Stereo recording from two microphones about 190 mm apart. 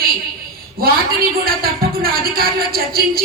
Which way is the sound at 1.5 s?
50° right (ahead or behind).